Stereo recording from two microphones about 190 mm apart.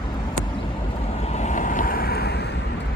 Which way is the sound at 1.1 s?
35° left (ahead or behind).